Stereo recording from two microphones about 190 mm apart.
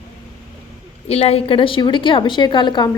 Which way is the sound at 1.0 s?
30° left (ahead or behind).